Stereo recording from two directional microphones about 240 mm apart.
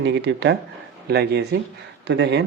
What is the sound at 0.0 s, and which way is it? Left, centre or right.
Speech, right.